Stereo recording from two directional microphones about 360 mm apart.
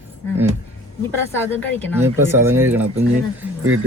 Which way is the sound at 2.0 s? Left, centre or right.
Centre.